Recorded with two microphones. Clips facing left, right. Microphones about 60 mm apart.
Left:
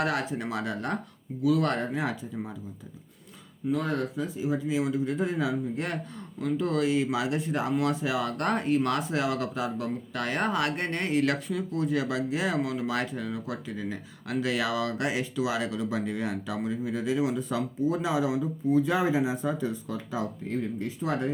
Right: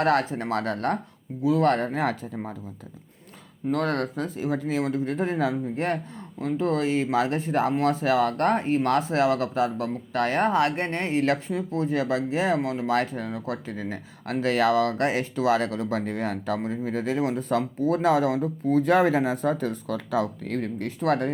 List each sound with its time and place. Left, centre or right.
0.0 s speech: right
1.4 s speech: right
3.7 s speech: right